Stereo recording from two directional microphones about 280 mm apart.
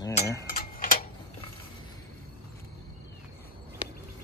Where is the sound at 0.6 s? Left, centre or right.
Left.